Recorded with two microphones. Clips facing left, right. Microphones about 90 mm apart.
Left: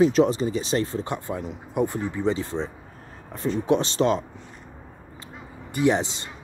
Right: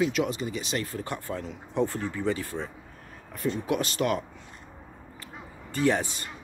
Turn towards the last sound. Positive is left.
turn(degrees=20)  # may be behind; listen again after turning